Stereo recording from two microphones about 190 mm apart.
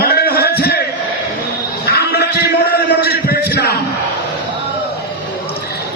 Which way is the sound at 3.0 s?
55° left (ahead or behind).